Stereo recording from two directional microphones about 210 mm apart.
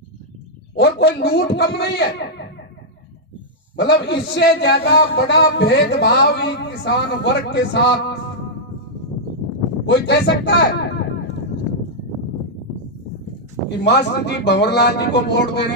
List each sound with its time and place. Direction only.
0.7 s a man's voice: 50° left (ahead or behind)
3.7 s a man's voice: 50° left (ahead or behind)
9.8 s a man's voice: 50° left (ahead or behind)
13.7 s a man's voice: 55° left (ahead or behind)